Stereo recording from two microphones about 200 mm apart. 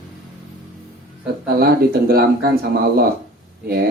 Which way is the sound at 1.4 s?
50° right (ahead or behind).